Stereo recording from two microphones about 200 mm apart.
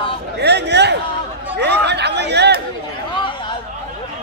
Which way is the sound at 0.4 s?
60° right (ahead or behind).